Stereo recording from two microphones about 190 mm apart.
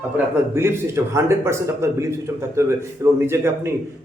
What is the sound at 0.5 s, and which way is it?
A man's voice, 15° right (ahead or behind).